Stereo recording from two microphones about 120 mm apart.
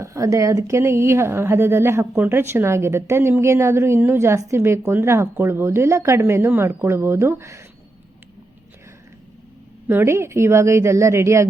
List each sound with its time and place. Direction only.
0.0 s a woman's voice: 25° right (ahead or behind)
9.9 s a woman's voice: 20° right (ahead or behind)